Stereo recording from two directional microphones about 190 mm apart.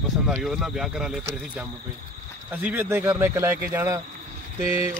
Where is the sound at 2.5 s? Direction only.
10° right (ahead or behind).